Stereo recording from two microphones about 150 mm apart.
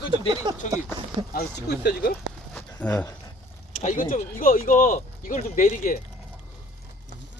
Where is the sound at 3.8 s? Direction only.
60° left (ahead or behind).